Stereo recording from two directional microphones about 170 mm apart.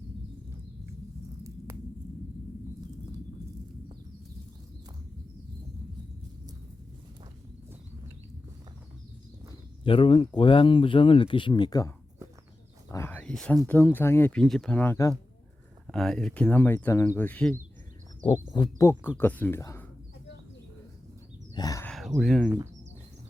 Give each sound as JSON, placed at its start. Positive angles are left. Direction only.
{"t": 9.8, "sound": "speech", "side_deg": 30}
{"t": 12.9, "sound": "a sound", "side_deg": 15}
{"t": 13.7, "sound": "speech", "side_deg": 10}
{"t": 15.9, "sound": "speech", "side_deg": 0}
{"t": 18.5, "sound": "speech", "side_deg": 25}
{"t": 21.5, "sound": "a sound", "side_deg": 20}
{"t": 21.8, "sound": "speech", "side_deg": 0}